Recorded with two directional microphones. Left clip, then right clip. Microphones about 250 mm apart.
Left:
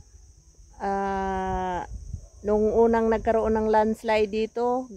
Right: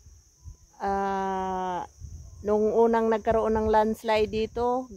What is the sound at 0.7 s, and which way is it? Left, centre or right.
Speech, centre.